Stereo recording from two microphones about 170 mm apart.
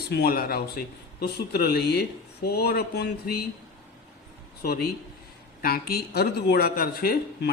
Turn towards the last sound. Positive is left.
turn(degrees=65)  # may be behind; listen again after turning